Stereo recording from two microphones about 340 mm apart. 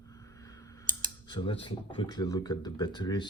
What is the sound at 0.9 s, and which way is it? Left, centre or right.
Speech, centre.